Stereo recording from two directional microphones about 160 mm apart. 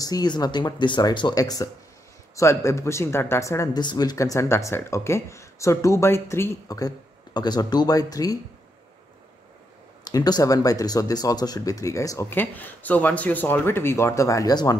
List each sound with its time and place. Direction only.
0.0 s speech: 25° left (ahead or behind)
10.0 s speech: 25° left (ahead or behind)